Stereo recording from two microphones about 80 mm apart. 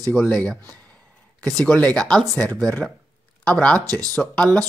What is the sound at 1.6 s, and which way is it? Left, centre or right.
Speech, centre.